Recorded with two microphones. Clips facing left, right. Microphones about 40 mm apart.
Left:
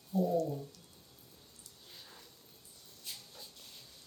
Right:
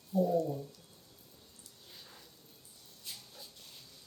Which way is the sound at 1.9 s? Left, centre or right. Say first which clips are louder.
Even; centre.